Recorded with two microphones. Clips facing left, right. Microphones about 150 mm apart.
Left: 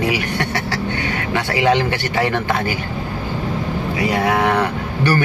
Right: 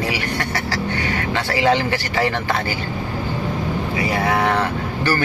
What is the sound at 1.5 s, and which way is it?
Speech, 20° left (ahead or behind).